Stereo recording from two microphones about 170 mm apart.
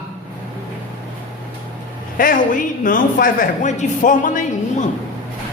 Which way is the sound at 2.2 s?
50° left (ahead or behind).